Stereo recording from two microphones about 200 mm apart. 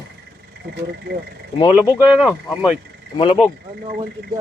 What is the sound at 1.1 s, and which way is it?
Speech, 55° right (ahead or behind).